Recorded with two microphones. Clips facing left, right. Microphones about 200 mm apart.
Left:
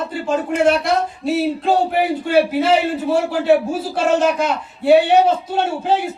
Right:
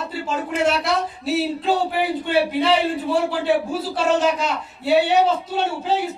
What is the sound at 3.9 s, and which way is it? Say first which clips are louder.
Speech: left 3 dB; 50° left (ahead or behind).